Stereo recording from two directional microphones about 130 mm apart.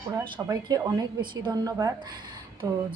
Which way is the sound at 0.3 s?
30° right (ahead or behind).